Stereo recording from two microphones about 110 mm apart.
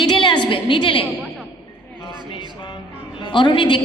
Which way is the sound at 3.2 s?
45° left (ahead or behind).